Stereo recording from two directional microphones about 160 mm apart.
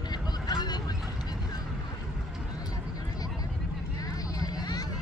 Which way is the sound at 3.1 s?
25° left (ahead or behind).